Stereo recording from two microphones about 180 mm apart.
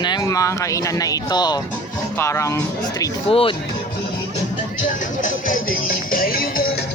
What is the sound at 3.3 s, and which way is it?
Speech, 30° left (ahead or behind).